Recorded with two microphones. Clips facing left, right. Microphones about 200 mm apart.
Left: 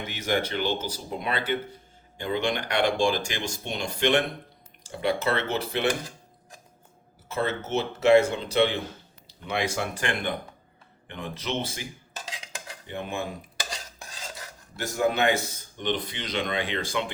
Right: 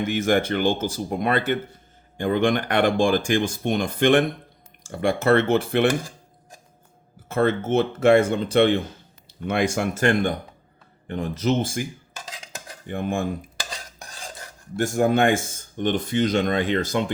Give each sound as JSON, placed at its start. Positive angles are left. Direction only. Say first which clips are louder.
{"t": 0.0, "sound": "speech", "louder": "right 7 dB", "side_deg": -50}
{"t": 7.3, "sound": "speech", "louder": "right 7 dB", "side_deg": -55}
{"t": 11.1, "sound": "dishes", "louder": "right 9 dB", "side_deg": -40}
{"t": 14.8, "sound": "speech", "louder": "right 5 dB", "side_deg": -50}